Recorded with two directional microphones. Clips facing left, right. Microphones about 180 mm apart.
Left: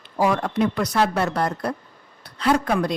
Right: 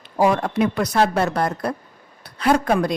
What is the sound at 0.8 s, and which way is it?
A woman's voice, 45° right (ahead or behind).